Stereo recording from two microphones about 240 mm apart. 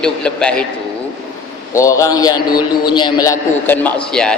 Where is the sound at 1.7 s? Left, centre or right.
Centre.